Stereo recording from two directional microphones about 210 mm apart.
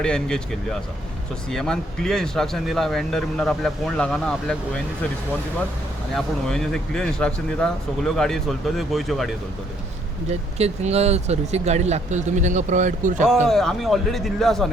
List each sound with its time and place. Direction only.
0.0 s speech: 5° left (ahead or behind)
6.1 s speech: 5° left (ahead or behind)
10.2 s speech: 30° right (ahead or behind)
13.2 s speech: centre (ahead or behind)